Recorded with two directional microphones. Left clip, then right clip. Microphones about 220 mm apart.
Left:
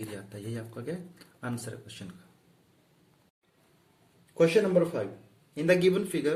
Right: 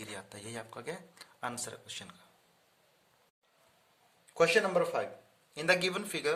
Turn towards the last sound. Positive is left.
turn(degrees=-45)  # may be behind; listen again after turning